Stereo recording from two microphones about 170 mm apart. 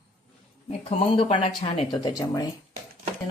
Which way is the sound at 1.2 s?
35° left (ahead or behind).